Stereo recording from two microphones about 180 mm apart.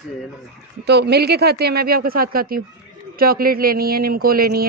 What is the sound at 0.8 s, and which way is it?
Speech, 65° right (ahead or behind).